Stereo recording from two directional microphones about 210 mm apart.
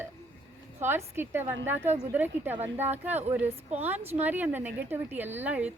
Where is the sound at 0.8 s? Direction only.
10° right (ahead or behind).